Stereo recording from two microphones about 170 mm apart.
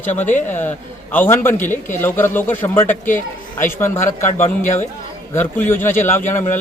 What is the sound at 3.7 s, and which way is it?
Speech, 15° left (ahead or behind).